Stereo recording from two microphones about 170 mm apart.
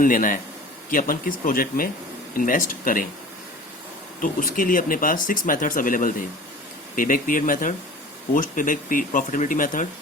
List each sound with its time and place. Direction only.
0.0 s speech: 55° left (ahead or behind)
4.2 s speech: 55° left (ahead or behind)